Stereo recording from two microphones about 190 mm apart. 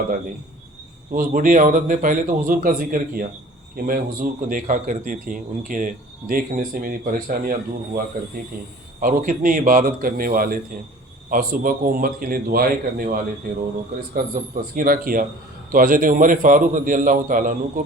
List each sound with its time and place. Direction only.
1.1 s a man's voice: 45° right (ahead or behind)
9.0 s a man's voice: 45° right (ahead or behind)
14.5 s a man's voice: 50° right (ahead or behind)